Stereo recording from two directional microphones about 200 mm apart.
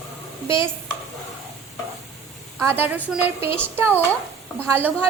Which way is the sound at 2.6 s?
10° right (ahead or behind).